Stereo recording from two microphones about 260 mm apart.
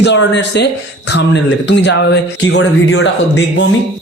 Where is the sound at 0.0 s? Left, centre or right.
Left.